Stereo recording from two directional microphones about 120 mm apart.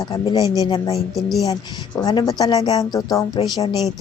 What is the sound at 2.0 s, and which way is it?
Speech, 30° left (ahead or behind).